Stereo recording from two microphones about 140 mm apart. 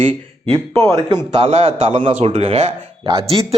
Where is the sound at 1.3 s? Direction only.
45° right (ahead or behind).